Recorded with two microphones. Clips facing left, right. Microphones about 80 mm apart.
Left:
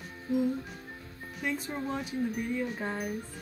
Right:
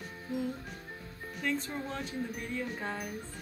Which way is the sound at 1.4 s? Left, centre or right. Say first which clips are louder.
Left 1 dB; centre.